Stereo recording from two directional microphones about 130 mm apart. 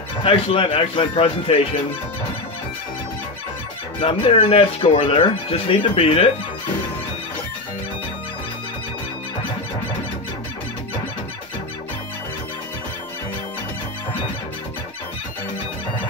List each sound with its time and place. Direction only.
0.2 s speech: 45° left (ahead or behind)
4.0 s speech: 45° left (ahead or behind)